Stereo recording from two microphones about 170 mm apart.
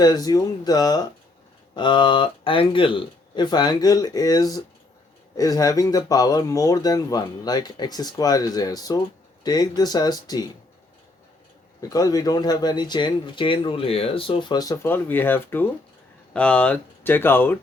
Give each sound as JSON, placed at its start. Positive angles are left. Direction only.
{"t": 0.0, "sound": "speech", "side_deg": 20}
{"t": 11.8, "sound": "speech", "side_deg": 20}